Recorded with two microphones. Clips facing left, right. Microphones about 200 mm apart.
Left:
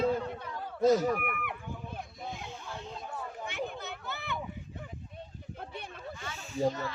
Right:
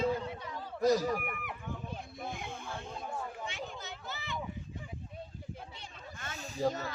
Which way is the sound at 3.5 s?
60° left (ahead or behind).